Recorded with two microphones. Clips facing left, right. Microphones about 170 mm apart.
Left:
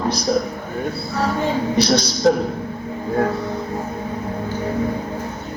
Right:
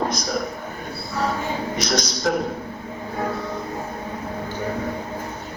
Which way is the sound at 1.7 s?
30° left (ahead or behind).